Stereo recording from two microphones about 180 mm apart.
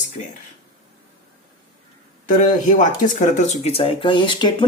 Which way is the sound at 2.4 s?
45° left (ahead or behind).